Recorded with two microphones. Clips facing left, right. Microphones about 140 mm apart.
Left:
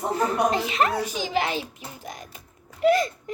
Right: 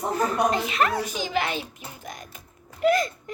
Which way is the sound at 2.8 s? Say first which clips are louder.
Left 1 dB; 30° left (ahead or behind).